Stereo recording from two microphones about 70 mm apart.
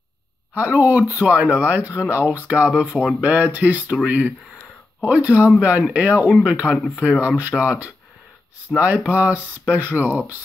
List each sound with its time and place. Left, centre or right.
0.6 s speech: right
2.7 s speech: centre
3.2 s speech: right
6.7 s speech: left
7.0 s speech: centre